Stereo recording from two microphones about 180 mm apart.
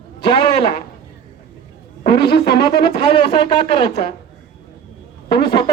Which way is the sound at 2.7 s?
25° left (ahead or behind).